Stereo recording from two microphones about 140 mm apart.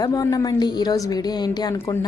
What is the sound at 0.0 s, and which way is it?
A woman's voice, 25° left (ahead or behind).